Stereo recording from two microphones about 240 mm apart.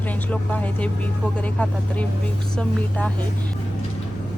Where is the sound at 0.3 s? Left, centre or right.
Centre.